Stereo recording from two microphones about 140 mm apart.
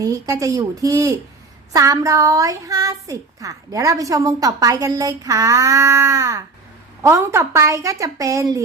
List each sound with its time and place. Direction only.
0.0 s a woman's voice: 25° right (ahead or behind)